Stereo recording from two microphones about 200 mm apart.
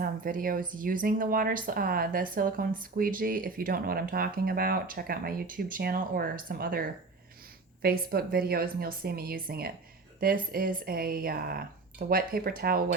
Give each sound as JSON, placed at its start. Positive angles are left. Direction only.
{"t": 0.0, "sound": "speech", "side_deg": -45}